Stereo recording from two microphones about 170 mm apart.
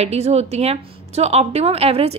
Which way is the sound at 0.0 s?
40° right (ahead or behind).